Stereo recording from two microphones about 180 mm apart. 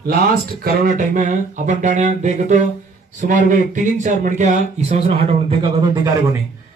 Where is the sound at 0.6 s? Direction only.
50° right (ahead or behind); by 5.8 s 30° right (ahead or behind).